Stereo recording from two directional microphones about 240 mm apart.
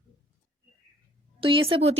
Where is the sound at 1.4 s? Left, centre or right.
Right.